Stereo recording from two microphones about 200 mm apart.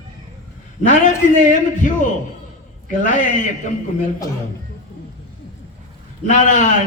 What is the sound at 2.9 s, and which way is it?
Speech, 40° left (ahead or behind).